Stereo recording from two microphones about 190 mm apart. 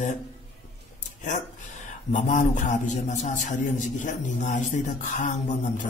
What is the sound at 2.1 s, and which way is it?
A man's voice, 40° left (ahead or behind).